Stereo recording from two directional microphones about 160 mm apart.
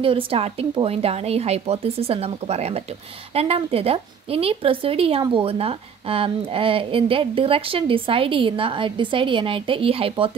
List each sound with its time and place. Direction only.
0.0 s a woman's voice: 35° right (ahead or behind)